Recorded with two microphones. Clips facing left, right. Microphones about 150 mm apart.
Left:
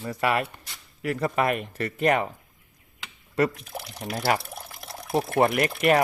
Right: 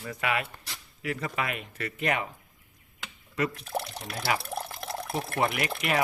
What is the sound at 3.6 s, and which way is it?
Speech, 65° right (ahead or behind).